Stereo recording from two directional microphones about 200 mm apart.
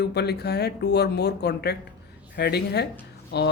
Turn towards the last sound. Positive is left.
turn(degrees=55)  # may be behind; listen again after turning